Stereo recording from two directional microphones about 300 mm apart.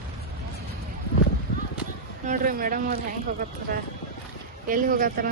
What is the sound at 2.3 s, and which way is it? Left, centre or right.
Speech, right.